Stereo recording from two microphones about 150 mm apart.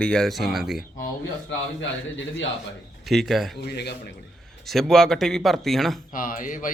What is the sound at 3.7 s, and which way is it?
Speech, 90° left.